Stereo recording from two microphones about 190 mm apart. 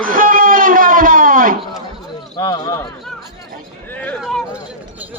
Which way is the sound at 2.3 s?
20° left (ahead or behind).